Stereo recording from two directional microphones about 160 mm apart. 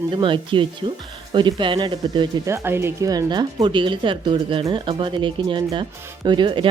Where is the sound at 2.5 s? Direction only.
15° right (ahead or behind).